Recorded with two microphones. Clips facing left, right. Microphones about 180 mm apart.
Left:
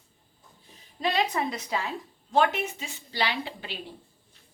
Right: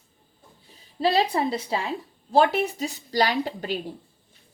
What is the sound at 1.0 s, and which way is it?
A woman's voice, 35° right (ahead or behind).